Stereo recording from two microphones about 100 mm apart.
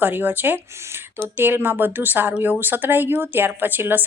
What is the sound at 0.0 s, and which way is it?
Speech, 20° right (ahead or behind).